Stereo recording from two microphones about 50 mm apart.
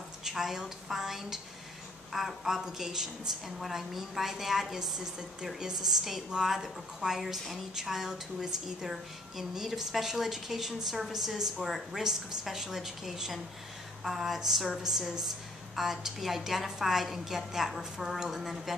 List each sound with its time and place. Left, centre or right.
0.2 s a woman's voice: centre